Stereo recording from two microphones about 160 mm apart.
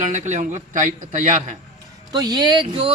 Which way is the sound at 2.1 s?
25° right (ahead or behind).